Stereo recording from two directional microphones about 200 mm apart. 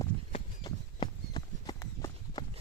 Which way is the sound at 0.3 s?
25° left (ahead or behind).